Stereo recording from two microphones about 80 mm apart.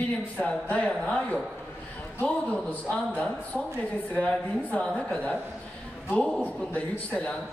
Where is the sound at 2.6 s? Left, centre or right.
Centre.